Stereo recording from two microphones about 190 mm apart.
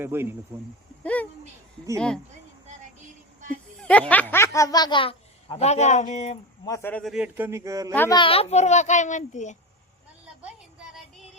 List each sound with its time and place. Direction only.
0.0 s a man's voice: 10° right (ahead or behind)
1.0 s a woman's voice: 5° left (ahead or behind)
3.8 s snicker: 5° left (ahead or behind)
4.1 s speech: 10° left (ahead or behind); by 6.4 s 35° left (ahead or behind)
6.7 s a man's voice: 15° left (ahead or behind)
7.0 s a man's voice: 5° right (ahead or behind)
8.1 s a child's voice: 30° left (ahead or behind)